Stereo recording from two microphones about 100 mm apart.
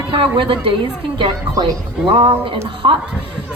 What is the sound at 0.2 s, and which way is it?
Speech, 60° right (ahead or behind).